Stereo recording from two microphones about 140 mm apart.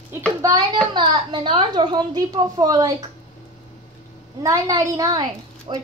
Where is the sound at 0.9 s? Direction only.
35° right (ahead or behind).